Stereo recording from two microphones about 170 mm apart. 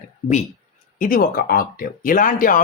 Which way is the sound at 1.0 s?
55° left (ahead or behind).